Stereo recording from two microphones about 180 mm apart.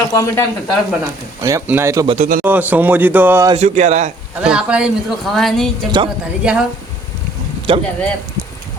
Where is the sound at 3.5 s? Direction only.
40° right (ahead or behind).